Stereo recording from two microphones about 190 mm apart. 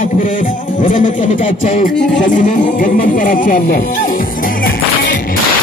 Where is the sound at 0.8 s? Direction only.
45° left (ahead or behind).